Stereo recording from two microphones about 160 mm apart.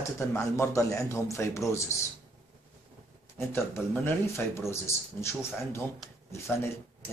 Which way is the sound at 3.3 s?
15° left (ahead or behind).